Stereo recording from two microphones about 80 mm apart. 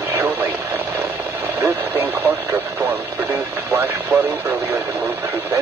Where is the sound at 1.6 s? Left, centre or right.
Right.